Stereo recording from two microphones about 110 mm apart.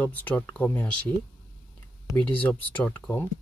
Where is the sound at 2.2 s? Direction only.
10° left (ahead or behind).